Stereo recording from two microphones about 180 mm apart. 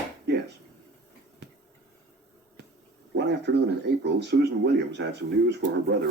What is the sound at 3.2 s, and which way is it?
Speech, 70° right (ahead or behind).